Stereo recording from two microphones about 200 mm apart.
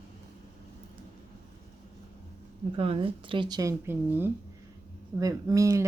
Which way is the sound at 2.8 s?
30° right (ahead or behind).